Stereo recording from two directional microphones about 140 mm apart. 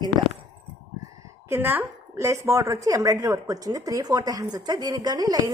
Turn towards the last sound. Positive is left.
turn(degrees=-25)  # may be behind; listen again after turning